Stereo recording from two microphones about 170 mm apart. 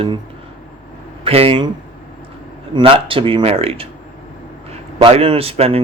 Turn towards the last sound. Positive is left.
turn(degrees=-35)  # may be behind; listen again after turning